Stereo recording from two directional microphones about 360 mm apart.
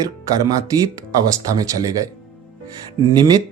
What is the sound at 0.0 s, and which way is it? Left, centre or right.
Speech, centre.